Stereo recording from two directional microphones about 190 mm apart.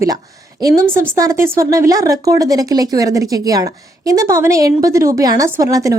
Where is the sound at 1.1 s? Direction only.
15° right (ahead or behind).